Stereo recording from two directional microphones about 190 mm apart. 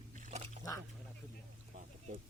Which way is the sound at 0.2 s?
40° right (ahead or behind).